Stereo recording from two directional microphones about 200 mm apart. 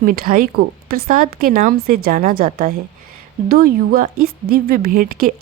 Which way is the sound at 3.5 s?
50° right (ahead or behind).